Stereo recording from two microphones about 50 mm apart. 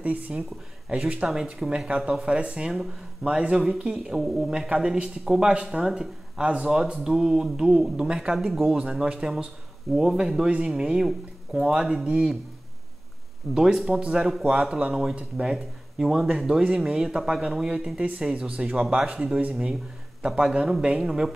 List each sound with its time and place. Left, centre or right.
0.0 s speech: right
1.2 s speech: centre
8.4 s speech: centre
13.6 s speech: centre